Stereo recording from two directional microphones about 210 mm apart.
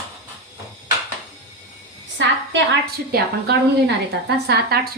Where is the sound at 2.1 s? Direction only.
55° right (ahead or behind).